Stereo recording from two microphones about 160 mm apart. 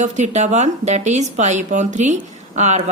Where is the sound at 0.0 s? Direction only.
45° right (ahead or behind).